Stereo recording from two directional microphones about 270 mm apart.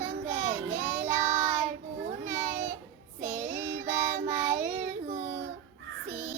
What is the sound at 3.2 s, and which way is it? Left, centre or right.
Child singing, right.